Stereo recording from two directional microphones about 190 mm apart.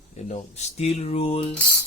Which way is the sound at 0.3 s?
35° left (ahead or behind).